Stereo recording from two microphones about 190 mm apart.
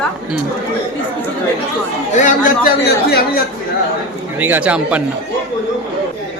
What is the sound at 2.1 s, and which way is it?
Speech, 40° left (ahead or behind).